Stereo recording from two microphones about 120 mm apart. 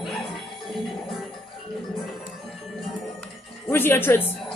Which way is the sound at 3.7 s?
20° left (ahead or behind).